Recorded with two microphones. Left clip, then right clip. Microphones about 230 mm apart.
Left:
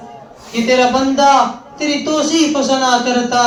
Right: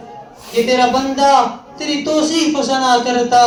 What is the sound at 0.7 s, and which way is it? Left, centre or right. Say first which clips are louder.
A man's voice: left 3 dB; right.